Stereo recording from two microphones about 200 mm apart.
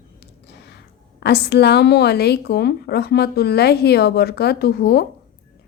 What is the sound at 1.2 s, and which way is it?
A woman's voice, 55° left (ahead or behind).